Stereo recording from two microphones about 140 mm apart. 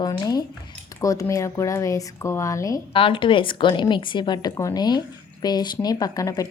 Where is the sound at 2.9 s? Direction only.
40° left (ahead or behind).